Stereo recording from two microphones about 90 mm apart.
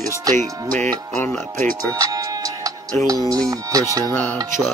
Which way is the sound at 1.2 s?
20° left (ahead or behind).